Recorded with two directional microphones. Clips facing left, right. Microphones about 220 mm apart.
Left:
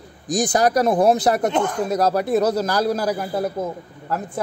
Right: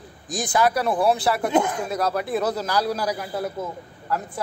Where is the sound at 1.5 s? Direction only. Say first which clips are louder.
Even; 10° right (ahead or behind).